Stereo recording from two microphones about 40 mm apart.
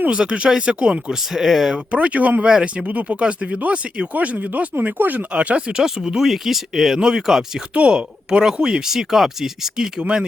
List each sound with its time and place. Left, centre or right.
0.1 s speech: right
1.3 s speech: centre
1.7 s speech: right
2.4 s speech: right
2.8 s speech: right
4.1 s speech: right
5.3 s speech: right
5.8 s speech: centre
7.7 s speech: right
8.9 s speech: centre
10.0 s speech: right